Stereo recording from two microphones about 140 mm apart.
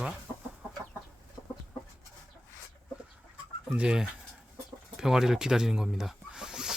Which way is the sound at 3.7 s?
5° right (ahead or behind).